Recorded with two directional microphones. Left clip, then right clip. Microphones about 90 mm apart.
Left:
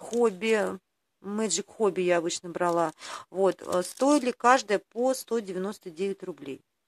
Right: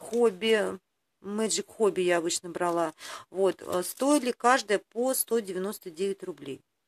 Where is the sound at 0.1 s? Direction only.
35° left (ahead or behind).